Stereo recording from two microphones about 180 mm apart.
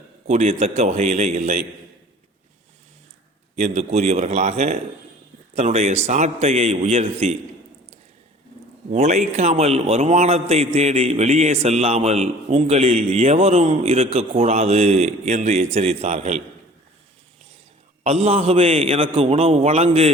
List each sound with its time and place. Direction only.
0.3 s a man's voice: 35° right (ahead or behind)
3.6 s a man's voice: 40° right (ahead or behind)
8.9 s a man's voice: 40° right (ahead or behind)
18.0 s a man's voice: 35° right (ahead or behind)